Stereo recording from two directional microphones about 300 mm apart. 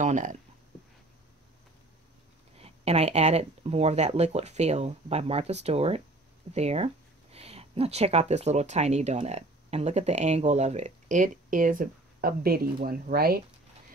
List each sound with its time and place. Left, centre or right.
0.0 s speech: right
2.5 s speech: right